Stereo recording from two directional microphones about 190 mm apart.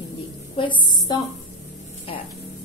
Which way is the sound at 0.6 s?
25° left (ahead or behind).